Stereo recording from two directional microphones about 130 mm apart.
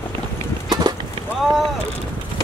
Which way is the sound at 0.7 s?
30° right (ahead or behind).